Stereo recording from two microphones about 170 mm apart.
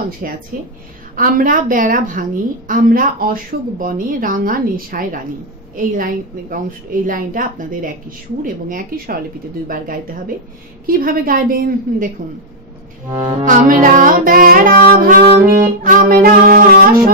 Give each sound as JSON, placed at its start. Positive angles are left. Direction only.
{"t": 0.2, "sound": "music", "side_deg": -60}
{"t": 1.1, "sound": "a woman's voice", "side_deg": -55}
{"t": 8.6, "sound": "music", "side_deg": -55}
{"t": 10.9, "sound": "music", "side_deg": -60}
{"t": 13.1, "sound": "music", "side_deg": -25}
{"t": 13.5, "sound": "a woman's voice", "side_deg": -50}
{"t": 13.9, "sound": "music", "side_deg": -55}